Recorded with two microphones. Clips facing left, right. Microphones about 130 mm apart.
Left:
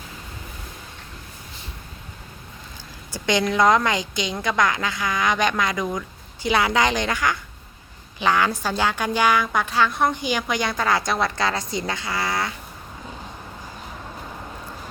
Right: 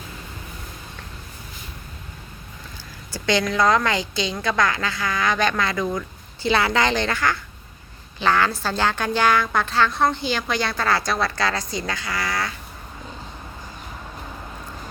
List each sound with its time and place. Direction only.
3.1 s a woman's voice: 20° left (ahead or behind)